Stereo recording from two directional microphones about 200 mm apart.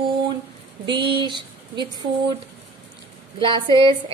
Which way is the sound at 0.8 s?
25° right (ahead or behind).